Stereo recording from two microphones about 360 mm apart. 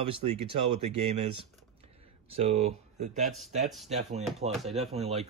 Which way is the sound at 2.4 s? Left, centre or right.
Centre.